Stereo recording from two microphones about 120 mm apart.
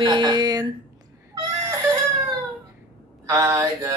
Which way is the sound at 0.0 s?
35° right (ahead or behind).